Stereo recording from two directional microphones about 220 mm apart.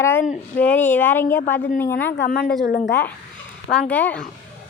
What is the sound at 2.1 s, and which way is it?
Speech, 50° left (ahead or behind).